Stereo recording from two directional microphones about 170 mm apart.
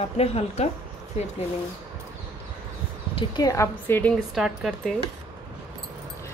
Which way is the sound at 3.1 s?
20° left (ahead or behind).